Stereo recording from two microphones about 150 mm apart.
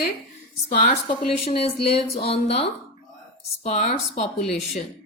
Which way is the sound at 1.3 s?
40° left (ahead or behind).